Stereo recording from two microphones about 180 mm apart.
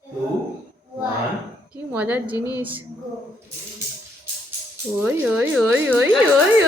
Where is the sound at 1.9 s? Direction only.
10° right (ahead or behind).